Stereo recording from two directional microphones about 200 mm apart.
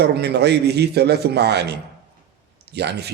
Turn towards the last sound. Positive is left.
turn(degrees=-55)  # may be behind; listen again after turning